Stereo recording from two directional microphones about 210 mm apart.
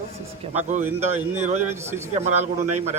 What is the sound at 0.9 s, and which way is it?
A man's voice, 30° right (ahead or behind).